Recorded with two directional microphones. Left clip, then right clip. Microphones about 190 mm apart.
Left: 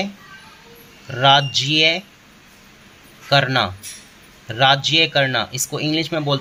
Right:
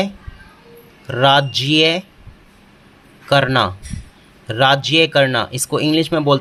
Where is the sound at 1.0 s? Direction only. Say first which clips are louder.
Right 1 dB; 25° right (ahead or behind).